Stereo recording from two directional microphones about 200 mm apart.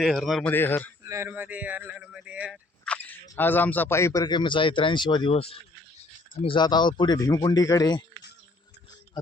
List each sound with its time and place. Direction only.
0.0 s a man's voice: centre (ahead or behind)
1.0 s speech: 15° right (ahead or behind); by 8.0 s 20° left (ahead or behind)